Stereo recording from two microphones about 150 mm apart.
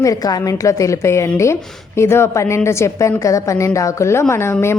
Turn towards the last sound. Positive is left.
turn(degrees=15)  # may be behind; listen again after turning